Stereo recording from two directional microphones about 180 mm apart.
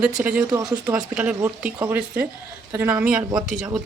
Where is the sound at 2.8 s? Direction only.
10° right (ahead or behind).